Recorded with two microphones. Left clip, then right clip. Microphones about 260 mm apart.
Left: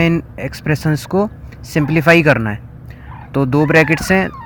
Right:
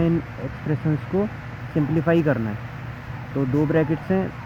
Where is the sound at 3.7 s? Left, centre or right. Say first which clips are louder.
Left 10 dB; left.